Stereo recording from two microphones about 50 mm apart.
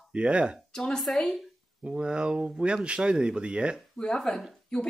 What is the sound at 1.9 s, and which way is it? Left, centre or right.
Speech, centre.